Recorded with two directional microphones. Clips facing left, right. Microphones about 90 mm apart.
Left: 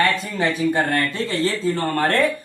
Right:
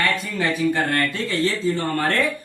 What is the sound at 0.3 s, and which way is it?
Speech, 25° left (ahead or behind).